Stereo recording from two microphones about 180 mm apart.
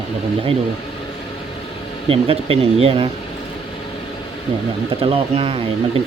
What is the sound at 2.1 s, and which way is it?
Speech, 30° right (ahead or behind).